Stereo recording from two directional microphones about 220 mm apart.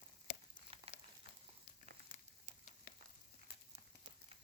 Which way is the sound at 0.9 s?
25° right (ahead or behind).